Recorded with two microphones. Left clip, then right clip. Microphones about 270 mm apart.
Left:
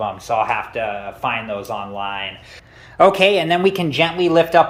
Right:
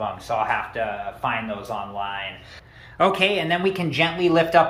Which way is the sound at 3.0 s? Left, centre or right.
Centre.